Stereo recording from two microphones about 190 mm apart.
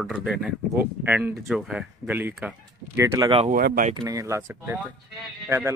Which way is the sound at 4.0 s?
15° right (ahead or behind).